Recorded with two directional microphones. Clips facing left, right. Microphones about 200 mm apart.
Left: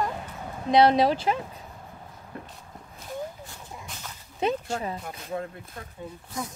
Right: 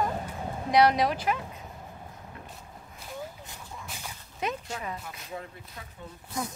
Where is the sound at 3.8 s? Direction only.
10° right (ahead or behind).